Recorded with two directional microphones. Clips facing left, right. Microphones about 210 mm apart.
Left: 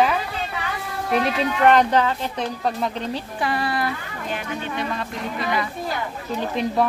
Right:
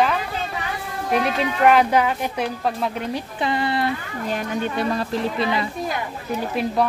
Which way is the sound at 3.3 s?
20° right (ahead or behind).